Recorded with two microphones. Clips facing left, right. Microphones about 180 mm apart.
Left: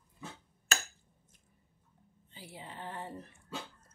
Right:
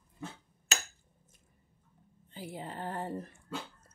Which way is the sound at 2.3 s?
45° right (ahead or behind).